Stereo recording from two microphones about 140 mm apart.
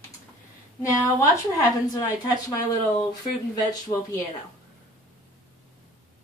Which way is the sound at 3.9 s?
35° left (ahead or behind).